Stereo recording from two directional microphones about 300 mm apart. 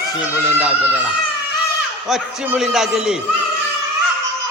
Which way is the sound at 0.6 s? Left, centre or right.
Centre.